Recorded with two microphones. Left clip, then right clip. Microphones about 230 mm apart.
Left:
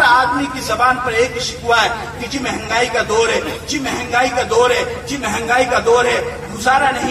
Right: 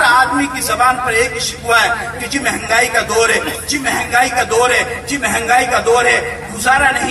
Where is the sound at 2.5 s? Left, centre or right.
Right.